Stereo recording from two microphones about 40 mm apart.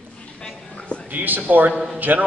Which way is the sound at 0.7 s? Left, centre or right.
Left.